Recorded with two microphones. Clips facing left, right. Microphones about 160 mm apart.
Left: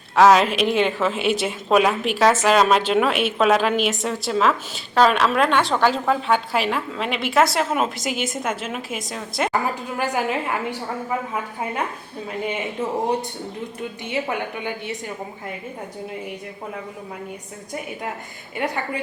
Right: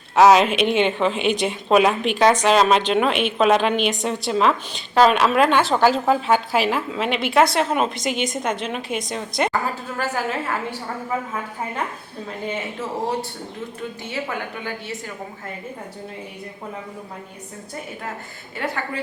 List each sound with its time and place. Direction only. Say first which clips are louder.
0.2 s a woman's voice: right 1 dB; centre (ahead or behind)
10.0 s a woman's voice: left 1 dB; 15° left (ahead or behind)
14.1 s a woman's voice: left 4 dB; 20° left (ahead or behind)
18.5 s a woman's voice: left 2 dB; 15° left (ahead or behind)